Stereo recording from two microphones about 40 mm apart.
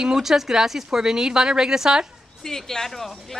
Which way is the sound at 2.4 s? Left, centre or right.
Centre.